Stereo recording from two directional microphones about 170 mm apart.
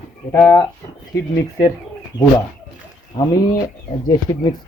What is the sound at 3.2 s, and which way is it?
Speech, 25° left (ahead or behind).